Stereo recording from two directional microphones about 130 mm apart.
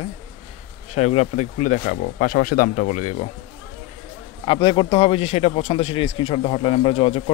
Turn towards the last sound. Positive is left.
turn(degrees=45)  # may be behind; listen again after turning